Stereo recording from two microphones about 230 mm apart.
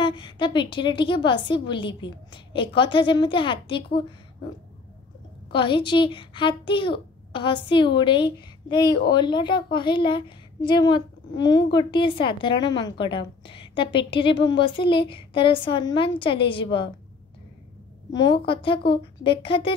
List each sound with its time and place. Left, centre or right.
0.0 s a woman's voice: left
5.5 s a woman's voice: left
18.1 s a woman's voice: centre